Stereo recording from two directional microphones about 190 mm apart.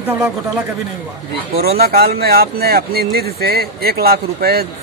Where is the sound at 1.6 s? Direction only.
55° right (ahead or behind).